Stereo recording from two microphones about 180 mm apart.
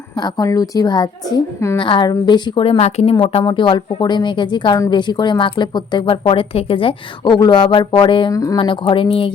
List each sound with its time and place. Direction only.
0.2 s speech: 20° left (ahead or behind)